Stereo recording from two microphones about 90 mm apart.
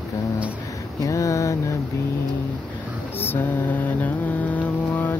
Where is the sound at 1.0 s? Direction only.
35° left (ahead or behind).